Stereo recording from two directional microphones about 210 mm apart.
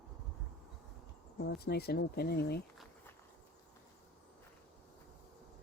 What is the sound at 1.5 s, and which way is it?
Speech, 50° left (ahead or behind).